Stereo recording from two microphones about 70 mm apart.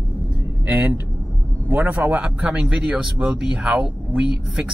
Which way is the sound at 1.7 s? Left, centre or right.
Right.